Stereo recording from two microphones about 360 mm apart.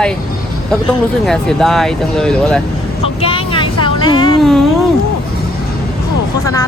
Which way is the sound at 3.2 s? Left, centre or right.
Centre.